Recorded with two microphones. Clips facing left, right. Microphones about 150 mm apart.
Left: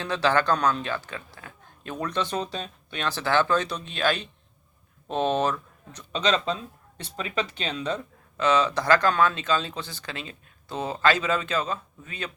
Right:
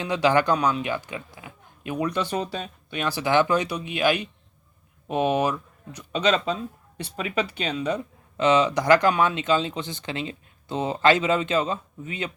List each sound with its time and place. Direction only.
0.0 s speech: 15° right (ahead or behind)